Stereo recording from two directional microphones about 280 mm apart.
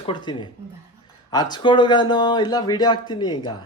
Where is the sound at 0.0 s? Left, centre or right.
Centre.